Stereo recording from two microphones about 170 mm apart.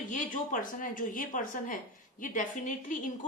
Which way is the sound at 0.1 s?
50° left (ahead or behind).